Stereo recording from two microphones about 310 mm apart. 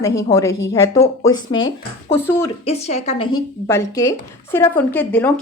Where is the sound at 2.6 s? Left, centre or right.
Centre.